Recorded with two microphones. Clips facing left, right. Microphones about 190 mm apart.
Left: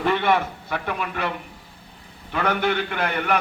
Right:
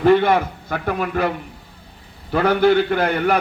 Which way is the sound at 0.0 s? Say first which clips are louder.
Right 7 dB; 40° right (ahead or behind).